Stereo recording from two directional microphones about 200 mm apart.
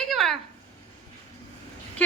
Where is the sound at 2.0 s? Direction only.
10° left (ahead or behind).